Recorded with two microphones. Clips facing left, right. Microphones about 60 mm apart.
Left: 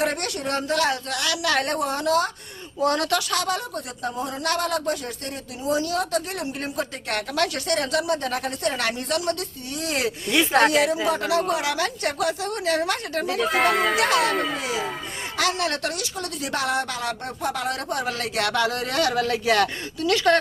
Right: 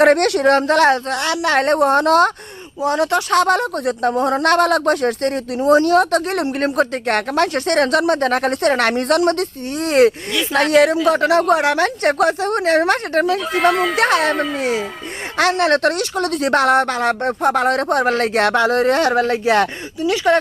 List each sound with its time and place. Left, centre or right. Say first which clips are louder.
0.0 s speech: right 13 dB; right
2.8 s speech: right 5 dB; centre
3.2 s speech: right 10 dB; right
7.7 s speech: right 10 dB; right
10.3 s speech: even; left
10.7 s speech: right 8 dB; right
13.4 s speech: right 4 dB; centre
14.0 s speech: right 5 dB; right
14.3 s speech: right 4 dB; centre
14.6 s speech: right 7 dB; right
20.0 s speech: right 4 dB; centre